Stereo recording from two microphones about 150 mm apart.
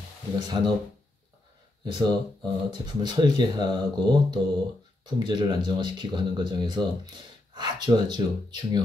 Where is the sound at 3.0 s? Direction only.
30° right (ahead or behind).